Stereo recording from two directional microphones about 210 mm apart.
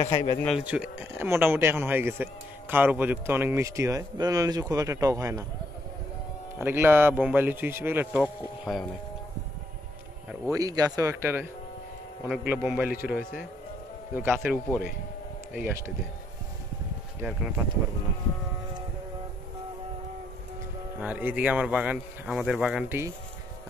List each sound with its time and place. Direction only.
0.0 s speech: 30° left (ahead or behind)
0.7 s speech: 5° right (ahead or behind)
6.6 s speech: 10° right (ahead or behind)
10.5 s speech: 15° right (ahead or behind)
14.1 s speech: 10° right (ahead or behind)
17.2 s speech: 10° right (ahead or behind)
21.0 s speech: 10° right (ahead or behind)